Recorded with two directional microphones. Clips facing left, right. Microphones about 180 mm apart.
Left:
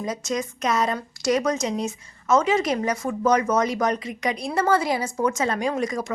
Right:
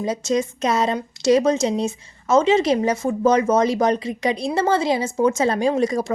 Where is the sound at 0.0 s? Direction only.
30° right (ahead or behind).